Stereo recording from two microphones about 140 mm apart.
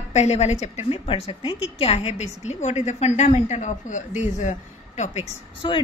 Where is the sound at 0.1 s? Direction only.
55° left (ahead or behind).